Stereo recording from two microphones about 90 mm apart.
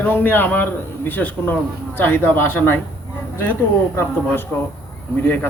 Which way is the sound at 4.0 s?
25° left (ahead or behind).